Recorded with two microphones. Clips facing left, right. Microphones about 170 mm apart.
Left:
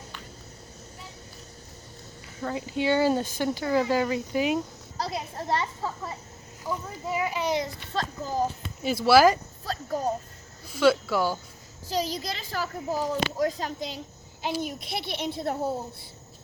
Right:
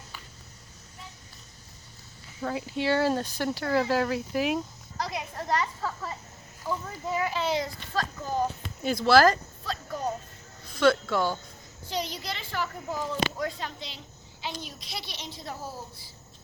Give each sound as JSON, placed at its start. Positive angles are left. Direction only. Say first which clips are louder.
{"t": 2.4, "sound": "speech", "louder": "left 1 dB", "side_deg": 0}
{"t": 4.9, "sound": "a child's voice", "louder": "left 1 dB", "side_deg": 30}
{"t": 8.8, "sound": "a child's voice", "louder": "left 2 dB", "side_deg": 5}
{"t": 10.7, "sound": "a child's voice", "louder": "left 1 dB", "side_deg": 5}
{"t": 11.9, "sound": "speech", "louder": "left 4 dB", "side_deg": 35}
{"t": 14.6, "sound": "a child's voice", "louder": "left 8 dB", "side_deg": 55}